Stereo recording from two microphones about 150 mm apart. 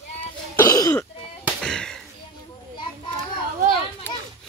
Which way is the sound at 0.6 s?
20° left (ahead or behind).